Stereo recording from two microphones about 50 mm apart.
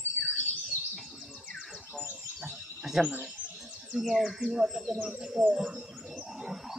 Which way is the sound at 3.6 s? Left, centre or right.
Right.